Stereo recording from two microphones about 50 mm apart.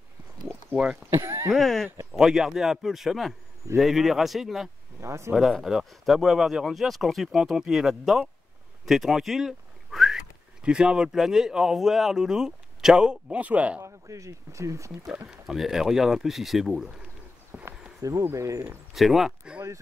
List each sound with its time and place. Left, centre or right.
1.1 s speech: right
1.5 s speech: centre
2.1 s speech: centre
5.0 s speech: right
5.7 s speech: centre
7.5 s speech: centre
8.8 s whistling: centre
10.6 s speech: centre
13.4 s speech: right
13.8 s speech: right
15.4 s speech: centre
17.5 s horse: centre
18.3 s speech: right
18.9 s speech: centre